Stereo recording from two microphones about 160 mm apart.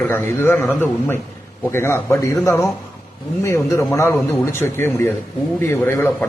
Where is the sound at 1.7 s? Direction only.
15° left (ahead or behind).